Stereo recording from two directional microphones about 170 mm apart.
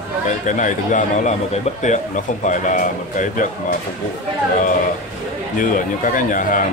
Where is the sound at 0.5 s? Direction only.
45° left (ahead or behind).